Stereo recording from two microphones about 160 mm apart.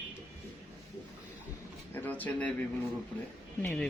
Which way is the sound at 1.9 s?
10° left (ahead or behind).